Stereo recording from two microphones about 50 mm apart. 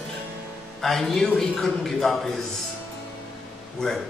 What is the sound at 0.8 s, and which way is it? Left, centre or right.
A man's voice, centre.